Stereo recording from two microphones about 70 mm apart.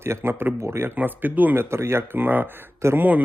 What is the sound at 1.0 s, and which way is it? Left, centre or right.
Speech, right.